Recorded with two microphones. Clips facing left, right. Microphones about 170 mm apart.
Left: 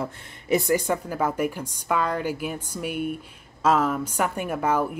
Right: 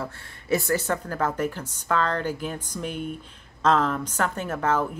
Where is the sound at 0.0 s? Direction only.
20° left (ahead or behind).